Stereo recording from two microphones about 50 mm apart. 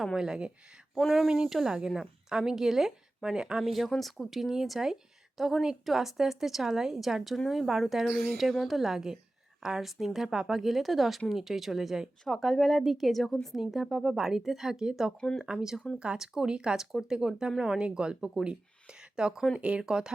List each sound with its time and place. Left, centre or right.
0.0 s a woman's voice: centre
0.9 s a woman's voice: centre